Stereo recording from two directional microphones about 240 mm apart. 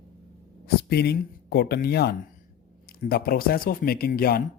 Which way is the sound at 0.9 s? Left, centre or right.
Left.